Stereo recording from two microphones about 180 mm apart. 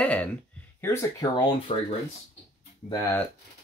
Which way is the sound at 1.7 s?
30° left (ahead or behind).